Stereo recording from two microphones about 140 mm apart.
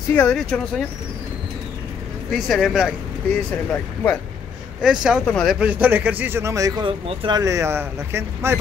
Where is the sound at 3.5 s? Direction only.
10° left (ahead or behind).